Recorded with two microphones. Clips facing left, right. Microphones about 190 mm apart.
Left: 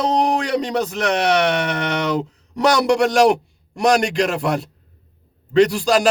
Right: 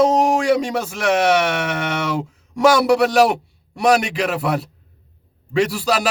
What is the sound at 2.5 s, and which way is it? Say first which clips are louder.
A man's voice: right 2 dB; 5° right (ahead or behind).